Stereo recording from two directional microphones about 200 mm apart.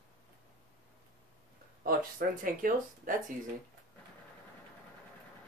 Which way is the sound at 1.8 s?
45° right (ahead or behind).